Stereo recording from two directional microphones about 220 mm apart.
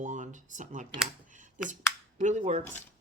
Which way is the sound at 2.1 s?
35° right (ahead or behind).